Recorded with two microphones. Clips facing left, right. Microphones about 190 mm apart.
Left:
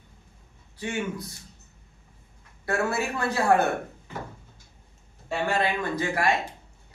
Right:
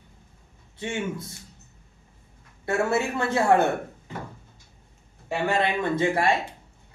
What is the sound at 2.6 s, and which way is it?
Speech, 25° right (ahead or behind).